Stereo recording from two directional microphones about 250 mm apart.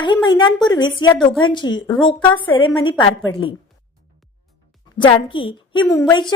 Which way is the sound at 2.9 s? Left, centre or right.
Centre.